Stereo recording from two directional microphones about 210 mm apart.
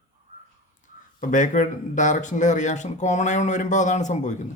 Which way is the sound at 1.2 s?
40° left (ahead or behind).